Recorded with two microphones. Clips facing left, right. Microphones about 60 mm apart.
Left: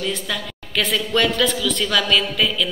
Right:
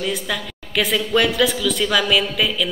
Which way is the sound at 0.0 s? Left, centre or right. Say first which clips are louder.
Right 1 dB; centre.